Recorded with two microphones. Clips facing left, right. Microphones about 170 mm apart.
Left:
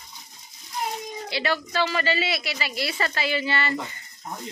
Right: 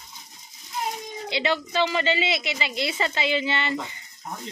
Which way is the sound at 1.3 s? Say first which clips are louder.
Right 2 dB; 20° right (ahead or behind).